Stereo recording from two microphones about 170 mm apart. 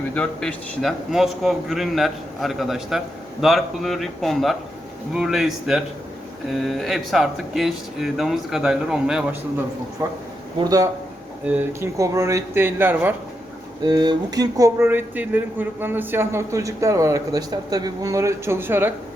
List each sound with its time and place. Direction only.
0.1 s a man's voice: 5° left (ahead or behind)
10.0 s speech: 15° right (ahead or behind)
11.4 s speech: 10° right (ahead or behind)
13.8 s speech: 25° right (ahead or behind)